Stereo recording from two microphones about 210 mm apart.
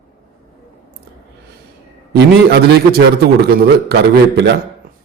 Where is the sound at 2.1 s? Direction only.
50° right (ahead or behind).